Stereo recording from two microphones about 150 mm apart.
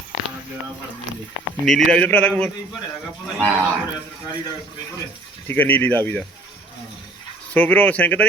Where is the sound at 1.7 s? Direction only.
5° left (ahead or behind).